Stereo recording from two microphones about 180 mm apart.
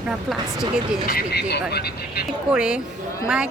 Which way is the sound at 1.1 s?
60° left (ahead or behind).